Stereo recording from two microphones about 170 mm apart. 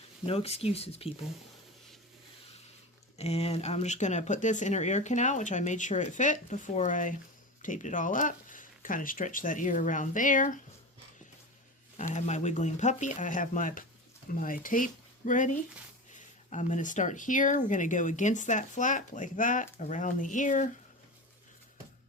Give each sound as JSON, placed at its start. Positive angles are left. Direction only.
{"t": 0.3, "sound": "speech", "side_deg": 35}
{"t": 3.2, "sound": "speech", "side_deg": 40}
{"t": 11.9, "sound": "speech", "side_deg": 45}